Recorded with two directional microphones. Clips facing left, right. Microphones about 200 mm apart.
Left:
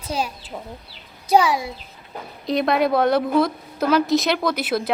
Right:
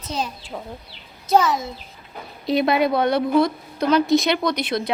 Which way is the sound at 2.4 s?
Centre (ahead or behind).